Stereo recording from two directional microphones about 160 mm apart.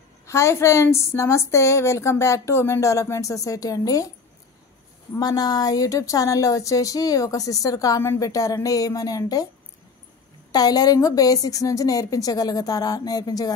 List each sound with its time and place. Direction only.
0.3 s a woman's voice: 15° left (ahead or behind)
5.2 s speech: 25° left (ahead or behind)
10.5 s speech: 25° left (ahead or behind)